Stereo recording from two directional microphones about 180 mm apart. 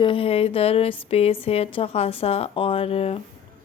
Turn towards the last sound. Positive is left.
turn(degrees=35)  # may be behind; listen again after turning